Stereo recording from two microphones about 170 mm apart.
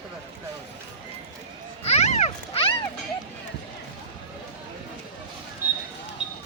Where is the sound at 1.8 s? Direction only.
40° left (ahead or behind).